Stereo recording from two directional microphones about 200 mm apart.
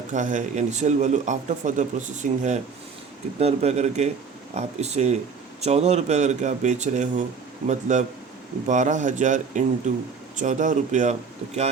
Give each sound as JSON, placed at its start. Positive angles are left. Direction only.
{"t": 0.1, "sound": "speech", "side_deg": -40}